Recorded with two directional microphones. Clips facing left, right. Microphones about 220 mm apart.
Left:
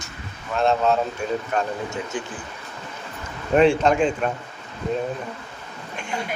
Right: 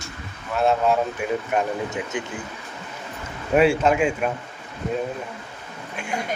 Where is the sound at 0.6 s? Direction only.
10° right (ahead or behind).